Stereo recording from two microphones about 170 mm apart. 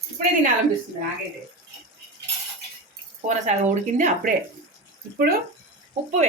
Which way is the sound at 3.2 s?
45° right (ahead or behind).